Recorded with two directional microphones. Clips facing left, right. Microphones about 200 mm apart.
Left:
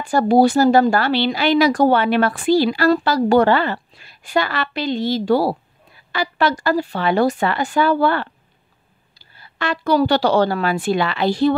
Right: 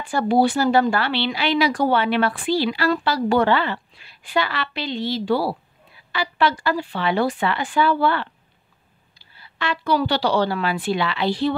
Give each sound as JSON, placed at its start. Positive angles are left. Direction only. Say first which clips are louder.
{"t": 0.0, "sound": "speech", "louder": "left 4 dB", "side_deg": 40}